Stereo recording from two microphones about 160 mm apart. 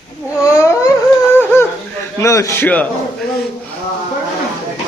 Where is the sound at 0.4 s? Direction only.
15° left (ahead or behind).